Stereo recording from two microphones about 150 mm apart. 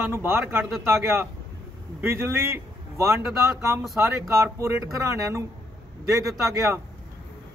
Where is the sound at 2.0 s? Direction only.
15° right (ahead or behind).